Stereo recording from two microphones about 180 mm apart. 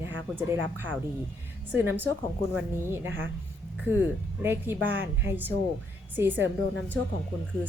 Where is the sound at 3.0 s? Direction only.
90° right.